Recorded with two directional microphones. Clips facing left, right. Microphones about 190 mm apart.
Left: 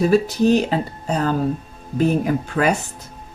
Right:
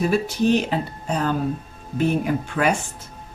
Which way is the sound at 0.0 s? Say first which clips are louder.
Left 4 dB; 40° left (ahead or behind).